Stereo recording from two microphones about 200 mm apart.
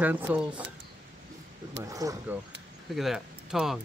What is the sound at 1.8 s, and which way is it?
Speech, 15° right (ahead or behind).